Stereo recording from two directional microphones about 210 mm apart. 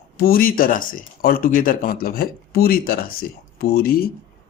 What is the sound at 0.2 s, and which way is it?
Speech, 45° left (ahead or behind).